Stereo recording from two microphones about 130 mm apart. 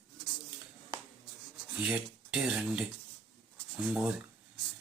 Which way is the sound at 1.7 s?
10° right (ahead or behind).